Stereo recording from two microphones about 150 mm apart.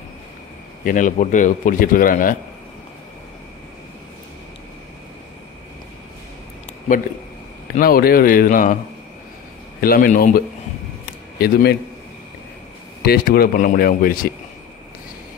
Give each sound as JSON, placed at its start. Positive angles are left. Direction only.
{"t": 0.8, "sound": "a man's voice", "side_deg": 60}
{"t": 7.8, "sound": "speech", "side_deg": 80}
{"t": 9.8, "sound": "speech", "side_deg": 75}
{"t": 11.3, "sound": "a man's voice", "side_deg": 90}
{"t": 13.0, "sound": "speech", "side_deg": 90}